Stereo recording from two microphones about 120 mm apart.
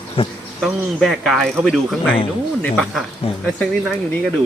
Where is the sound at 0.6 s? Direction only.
Centre (ahead or behind).